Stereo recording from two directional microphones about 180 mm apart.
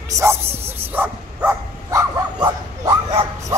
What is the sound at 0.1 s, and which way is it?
Bow-wow, 15° right (ahead or behind).